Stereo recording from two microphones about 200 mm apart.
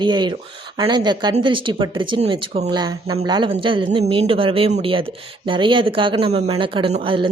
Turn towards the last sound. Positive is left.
turn(degrees=-25)  # may be behind; listen again after turning